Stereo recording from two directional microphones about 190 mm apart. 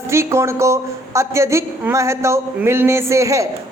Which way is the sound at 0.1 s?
15° right (ahead or behind).